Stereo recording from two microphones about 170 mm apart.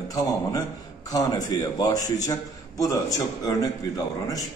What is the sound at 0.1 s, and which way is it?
A man's voice, 20° left (ahead or behind).